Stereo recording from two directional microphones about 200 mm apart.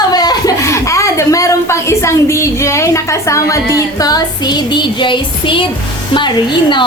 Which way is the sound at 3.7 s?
20° left (ahead or behind).